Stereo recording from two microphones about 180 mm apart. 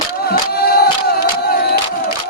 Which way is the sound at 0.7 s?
60° left (ahead or behind).